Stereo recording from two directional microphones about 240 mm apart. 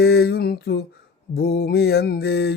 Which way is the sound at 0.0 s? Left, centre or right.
Left.